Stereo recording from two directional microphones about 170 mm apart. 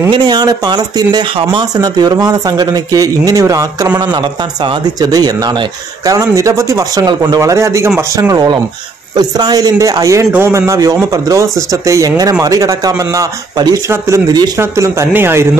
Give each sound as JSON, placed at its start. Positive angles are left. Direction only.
{"t": 0.1, "sound": "speech", "side_deg": -25}